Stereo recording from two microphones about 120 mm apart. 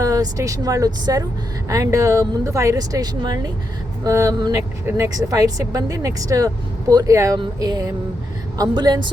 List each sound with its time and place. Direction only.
0.0 s a woman's voice: 30° right (ahead or behind)